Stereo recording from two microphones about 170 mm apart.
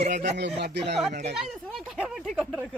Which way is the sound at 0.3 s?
90° right.